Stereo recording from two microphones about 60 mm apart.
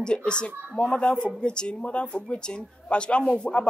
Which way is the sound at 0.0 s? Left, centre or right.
Centre.